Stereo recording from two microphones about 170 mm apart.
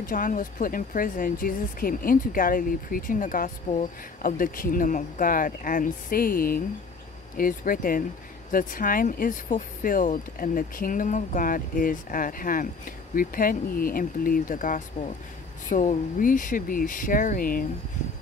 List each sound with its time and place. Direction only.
0.0 s speech: 55° left (ahead or behind)